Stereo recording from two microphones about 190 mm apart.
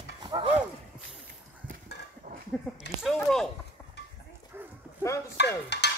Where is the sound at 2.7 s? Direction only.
5° left (ahead or behind).